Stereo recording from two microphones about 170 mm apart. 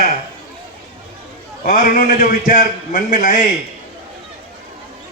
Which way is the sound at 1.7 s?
55° left (ahead or behind).